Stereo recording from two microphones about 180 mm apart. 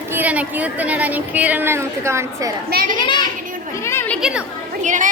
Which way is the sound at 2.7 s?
50° right (ahead or behind).